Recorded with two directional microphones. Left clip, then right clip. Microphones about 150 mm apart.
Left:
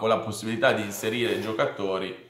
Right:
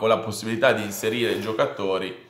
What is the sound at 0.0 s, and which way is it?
Speech, 25° right (ahead or behind).